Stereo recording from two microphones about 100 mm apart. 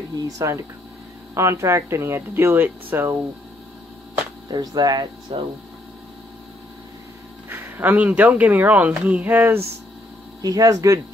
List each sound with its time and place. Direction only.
0.4 s speech: 35° right (ahead or behind)
4.5 s speech: 45° right (ahead or behind)
5.3 s speech: 65° right (ahead or behind)
7.4 s speech: 20° right (ahead or behind)
10.4 s speech: 35° right (ahead or behind)